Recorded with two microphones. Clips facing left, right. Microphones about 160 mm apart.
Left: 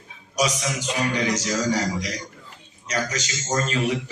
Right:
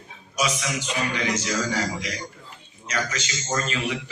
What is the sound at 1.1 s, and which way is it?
A man's voice, 40° left (ahead or behind).